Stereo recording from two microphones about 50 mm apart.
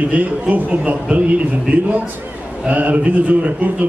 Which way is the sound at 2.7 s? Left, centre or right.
Right.